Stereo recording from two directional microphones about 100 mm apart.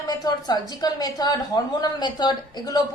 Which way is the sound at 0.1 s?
40° left (ahead or behind).